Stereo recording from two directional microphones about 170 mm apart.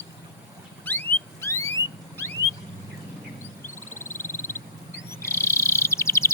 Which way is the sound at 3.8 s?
15° left (ahead or behind).